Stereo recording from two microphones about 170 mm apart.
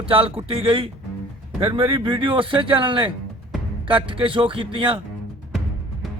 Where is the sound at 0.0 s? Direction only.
35° right (ahead or behind).